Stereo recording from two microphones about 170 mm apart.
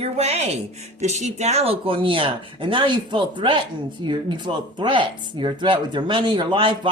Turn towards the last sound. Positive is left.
turn(degrees=-30)  # may be behind; listen again after turning